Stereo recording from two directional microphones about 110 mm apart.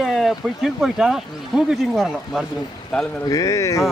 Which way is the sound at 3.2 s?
30° left (ahead or behind).